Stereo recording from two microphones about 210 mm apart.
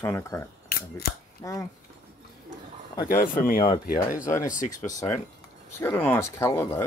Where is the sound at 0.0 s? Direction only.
15° left (ahead or behind).